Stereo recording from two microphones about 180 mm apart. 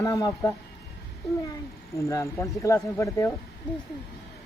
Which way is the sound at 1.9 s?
15° left (ahead or behind).